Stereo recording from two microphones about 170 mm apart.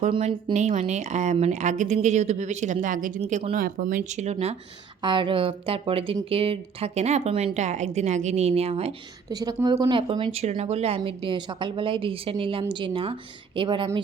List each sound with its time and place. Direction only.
0.1 s speech: 30° right (ahead or behind)
9.3 s a woman's voice: 20° right (ahead or behind)
10.6 s a woman's voice: 40° right (ahead or behind)